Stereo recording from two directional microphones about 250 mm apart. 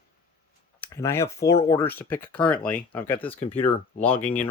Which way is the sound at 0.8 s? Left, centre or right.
Centre.